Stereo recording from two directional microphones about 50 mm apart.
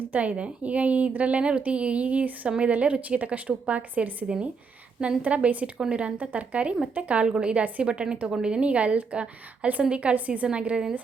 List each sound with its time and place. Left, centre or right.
0.0 s a woman's voice: right
5.7 s a woman's voice: centre
6.1 s a woman's voice: right
7.3 s a woman's voice: centre
7.5 s a woman's voice: right